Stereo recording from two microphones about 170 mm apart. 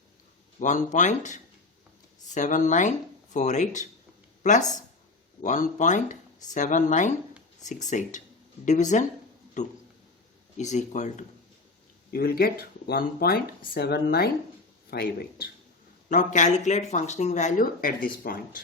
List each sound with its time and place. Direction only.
0.6 s speech: 45° left (ahead or behind)
5.4 s speech: 45° left (ahead or behind)
12.1 s speech: 60° left (ahead or behind)
16.0 s speech: 45° left (ahead or behind)